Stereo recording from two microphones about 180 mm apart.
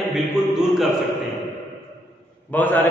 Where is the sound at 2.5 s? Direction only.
10° left (ahead or behind).